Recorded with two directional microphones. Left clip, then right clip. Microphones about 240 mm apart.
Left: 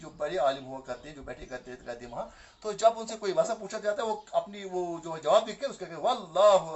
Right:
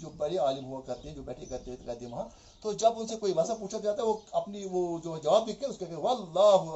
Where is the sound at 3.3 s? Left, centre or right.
Left.